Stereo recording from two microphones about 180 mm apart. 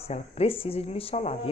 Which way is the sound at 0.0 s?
35° left (ahead or behind).